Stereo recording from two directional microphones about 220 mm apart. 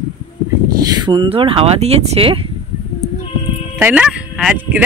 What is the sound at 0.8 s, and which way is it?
A man's voice, 20° right (ahead or behind).